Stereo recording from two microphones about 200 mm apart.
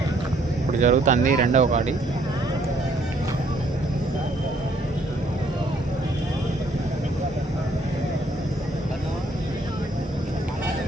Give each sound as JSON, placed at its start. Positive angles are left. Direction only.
{"t": 0.8, "sound": "speech", "side_deg": -35}